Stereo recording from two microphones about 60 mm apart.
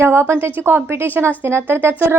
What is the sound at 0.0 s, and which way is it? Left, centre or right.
A woman's voice, right.